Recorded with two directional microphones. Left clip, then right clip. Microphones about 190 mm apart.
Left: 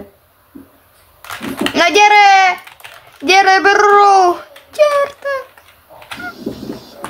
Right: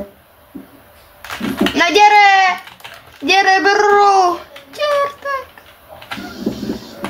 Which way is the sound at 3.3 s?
20° left (ahead or behind).